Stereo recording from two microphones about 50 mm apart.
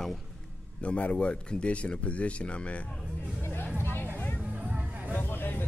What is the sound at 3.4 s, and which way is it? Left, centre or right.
Hubbub, left.